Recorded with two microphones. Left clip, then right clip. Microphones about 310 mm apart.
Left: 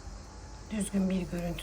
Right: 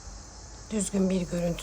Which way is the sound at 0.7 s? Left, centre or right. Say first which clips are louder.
Right 5 dB; centre.